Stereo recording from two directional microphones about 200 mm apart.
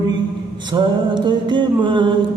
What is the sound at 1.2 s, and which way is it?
Music, 25° right (ahead or behind).